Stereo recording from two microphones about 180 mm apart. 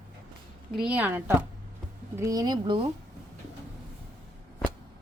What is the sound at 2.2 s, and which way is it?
Speech, 20° right (ahead or behind).